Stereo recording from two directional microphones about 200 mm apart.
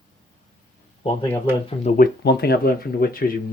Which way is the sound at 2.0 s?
55° left (ahead or behind).